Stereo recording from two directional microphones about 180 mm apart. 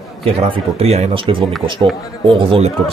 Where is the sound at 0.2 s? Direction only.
35° right (ahead or behind).